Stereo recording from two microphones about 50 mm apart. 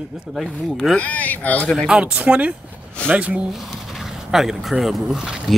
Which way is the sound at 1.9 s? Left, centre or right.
Centre.